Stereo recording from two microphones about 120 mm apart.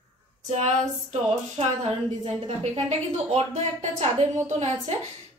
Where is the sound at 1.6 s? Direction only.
60° right (ahead or behind).